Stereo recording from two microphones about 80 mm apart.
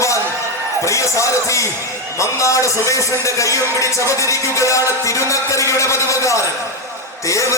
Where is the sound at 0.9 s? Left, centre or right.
Left.